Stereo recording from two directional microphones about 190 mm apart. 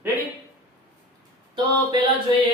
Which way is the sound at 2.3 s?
25° right (ahead or behind).